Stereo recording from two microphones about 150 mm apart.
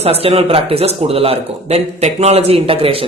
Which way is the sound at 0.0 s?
40° right (ahead or behind).